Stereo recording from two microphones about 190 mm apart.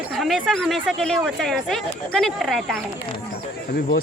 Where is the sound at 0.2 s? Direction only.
Centre (ahead or behind).